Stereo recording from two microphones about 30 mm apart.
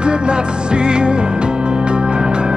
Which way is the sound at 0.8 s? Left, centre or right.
Right.